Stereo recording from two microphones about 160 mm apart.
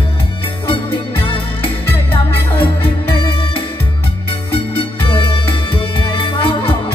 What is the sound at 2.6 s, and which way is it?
Music, 35° left (ahead or behind).